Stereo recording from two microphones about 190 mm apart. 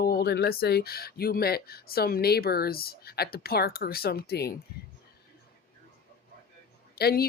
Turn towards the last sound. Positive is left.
turn(degrees=55)  # may be behind; listen again after turning